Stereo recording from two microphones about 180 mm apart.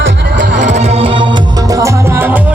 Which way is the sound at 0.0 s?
85° right.